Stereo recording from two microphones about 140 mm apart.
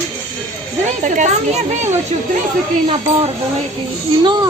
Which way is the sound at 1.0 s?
60° right (ahead or behind).